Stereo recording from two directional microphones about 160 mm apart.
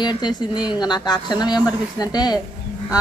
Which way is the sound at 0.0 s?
25° left (ahead or behind).